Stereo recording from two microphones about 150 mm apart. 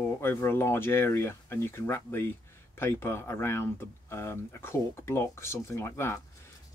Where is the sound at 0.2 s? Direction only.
15° left (ahead or behind).